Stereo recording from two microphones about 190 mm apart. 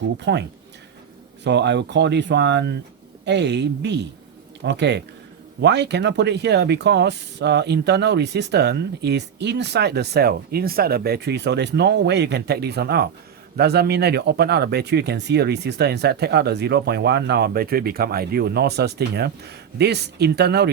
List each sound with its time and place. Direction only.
0.2 s speech: 65° right (ahead or behind)
1.5 s speech: 65° right (ahead or behind)